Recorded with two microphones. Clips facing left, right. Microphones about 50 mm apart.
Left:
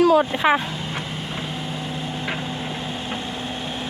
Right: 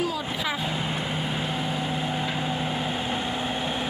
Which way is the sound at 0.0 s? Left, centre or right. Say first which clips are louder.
Left 12 dB; left.